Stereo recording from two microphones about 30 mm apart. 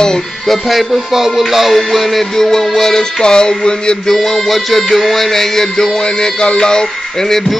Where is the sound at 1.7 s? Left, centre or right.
Centre; by 3.9 s left.